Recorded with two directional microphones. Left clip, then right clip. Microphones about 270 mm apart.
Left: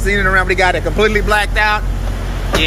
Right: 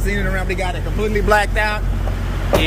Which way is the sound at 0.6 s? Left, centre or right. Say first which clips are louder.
Left 10 dB; left.